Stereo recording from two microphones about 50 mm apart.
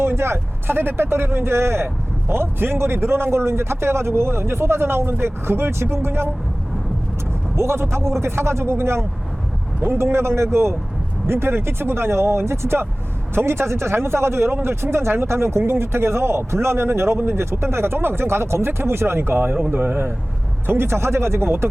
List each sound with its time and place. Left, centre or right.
0.0 s speech: right
7.5 s speech: right